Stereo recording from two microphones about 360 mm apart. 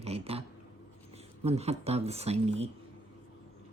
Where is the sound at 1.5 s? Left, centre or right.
Centre.